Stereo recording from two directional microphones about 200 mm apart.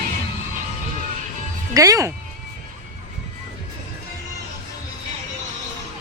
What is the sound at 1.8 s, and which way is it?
Speech, 15° right (ahead or behind).